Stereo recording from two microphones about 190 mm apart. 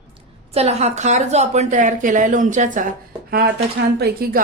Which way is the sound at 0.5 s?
35° right (ahead or behind).